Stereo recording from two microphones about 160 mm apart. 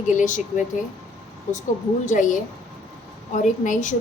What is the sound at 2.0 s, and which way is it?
A woman's voice, 55° left (ahead or behind).